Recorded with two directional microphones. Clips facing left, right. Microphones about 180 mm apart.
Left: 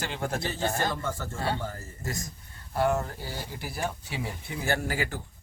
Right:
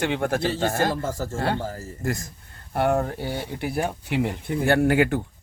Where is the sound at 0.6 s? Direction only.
85° right.